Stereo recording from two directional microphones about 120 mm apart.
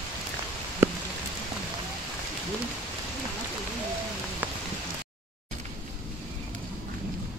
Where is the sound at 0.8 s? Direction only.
15° right (ahead or behind).